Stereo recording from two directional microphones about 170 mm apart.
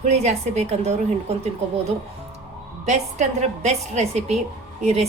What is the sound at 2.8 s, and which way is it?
A woman's voice, 40° right (ahead or behind).